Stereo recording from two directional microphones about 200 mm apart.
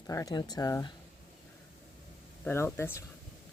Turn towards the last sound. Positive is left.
turn(degrees=10)  # may be behind; listen again after turning